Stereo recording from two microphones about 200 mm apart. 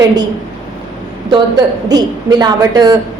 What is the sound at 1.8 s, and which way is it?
A woman's voice, 20° right (ahead or behind).